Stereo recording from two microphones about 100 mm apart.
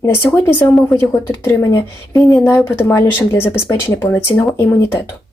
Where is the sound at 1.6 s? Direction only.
35° left (ahead or behind); by 5.0 s 15° left (ahead or behind).